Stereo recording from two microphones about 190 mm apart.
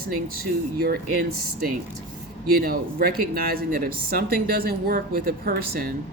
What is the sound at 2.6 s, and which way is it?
A woman's voice, 50° right (ahead or behind).